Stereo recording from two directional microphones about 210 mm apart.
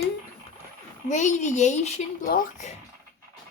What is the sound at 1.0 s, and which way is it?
Speech, 35° left (ahead or behind).